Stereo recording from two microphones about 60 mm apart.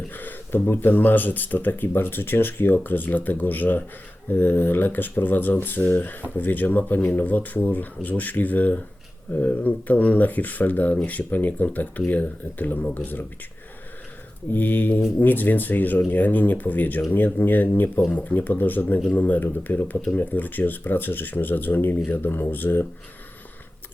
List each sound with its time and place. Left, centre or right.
0.1 s speech: left
14.5 s speech: left